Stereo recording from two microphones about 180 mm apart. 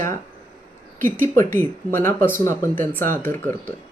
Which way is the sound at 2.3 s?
15° left (ahead or behind).